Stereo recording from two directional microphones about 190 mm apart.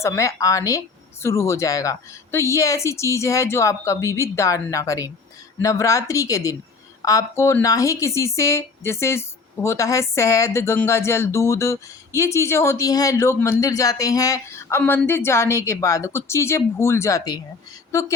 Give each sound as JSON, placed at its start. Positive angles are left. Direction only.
{"t": 0.0, "sound": "a woman's voice", "side_deg": 15}